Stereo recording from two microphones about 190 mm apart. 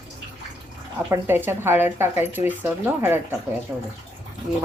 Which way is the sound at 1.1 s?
10° right (ahead or behind).